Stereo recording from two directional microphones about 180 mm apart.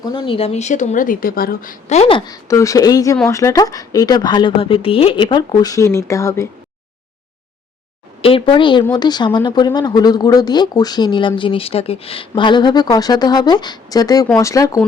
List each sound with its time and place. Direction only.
0.0 s speech: 25° left (ahead or behind)
8.2 s speech: 30° left (ahead or behind)